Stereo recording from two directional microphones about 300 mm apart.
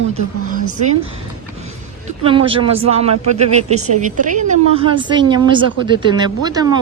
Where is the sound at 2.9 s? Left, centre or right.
Centre.